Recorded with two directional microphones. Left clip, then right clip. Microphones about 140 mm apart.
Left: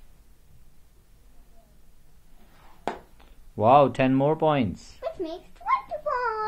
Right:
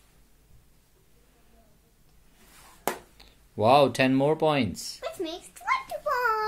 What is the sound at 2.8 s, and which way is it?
Speech, 25° right (ahead or behind).